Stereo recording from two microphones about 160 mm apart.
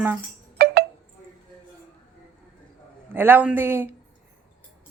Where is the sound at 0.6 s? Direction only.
75° right (ahead or behind).